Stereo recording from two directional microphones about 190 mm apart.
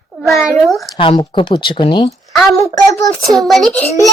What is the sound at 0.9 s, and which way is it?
A man's voice, 25° left (ahead or behind).